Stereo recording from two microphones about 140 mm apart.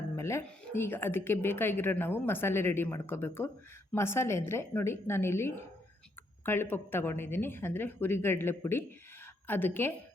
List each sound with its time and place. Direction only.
0.2 s music: 20° left (ahead or behind)
0.4 s a woman's voice: 15° left (ahead or behind)